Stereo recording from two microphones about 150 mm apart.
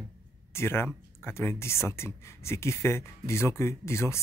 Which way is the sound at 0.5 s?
15° left (ahead or behind).